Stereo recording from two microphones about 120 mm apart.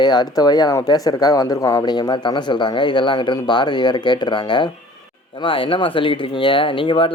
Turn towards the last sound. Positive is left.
turn(degrees=45)  # may be behind; listen again after turning